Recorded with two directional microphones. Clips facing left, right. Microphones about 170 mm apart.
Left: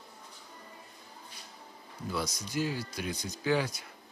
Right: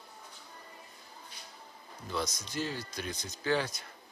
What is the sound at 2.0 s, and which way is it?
Speech, 10° left (ahead or behind).